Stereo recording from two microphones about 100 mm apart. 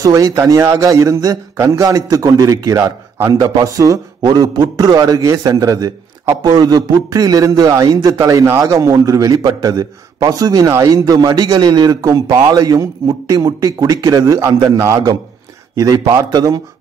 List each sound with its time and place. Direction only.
0.0 s a man's voice: 35° right (ahead or behind)
3.3 s a man's voice: 40° right (ahead or behind)